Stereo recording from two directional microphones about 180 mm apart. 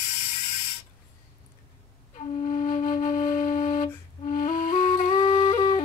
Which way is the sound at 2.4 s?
40° left (ahead or behind).